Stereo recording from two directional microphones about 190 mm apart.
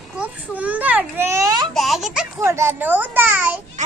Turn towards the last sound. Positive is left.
turn(degrees=-10)  # may be behind; listen again after turning